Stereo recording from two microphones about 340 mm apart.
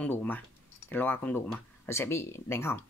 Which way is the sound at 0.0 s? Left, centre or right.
Centre.